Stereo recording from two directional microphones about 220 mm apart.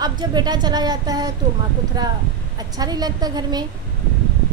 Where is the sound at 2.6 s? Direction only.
15° right (ahead or behind).